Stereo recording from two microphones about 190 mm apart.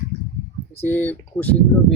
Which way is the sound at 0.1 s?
90° left.